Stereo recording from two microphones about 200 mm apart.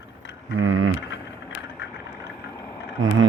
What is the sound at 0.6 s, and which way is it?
Speech, 80° right.